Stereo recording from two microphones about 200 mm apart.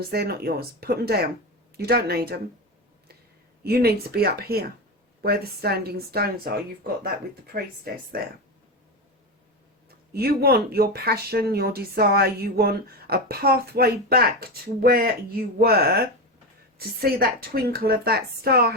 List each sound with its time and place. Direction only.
0.0 s speech: 50° right (ahead or behind)
3.6 s speech: 50° right (ahead or behind)
10.1 s speech: 50° right (ahead or behind)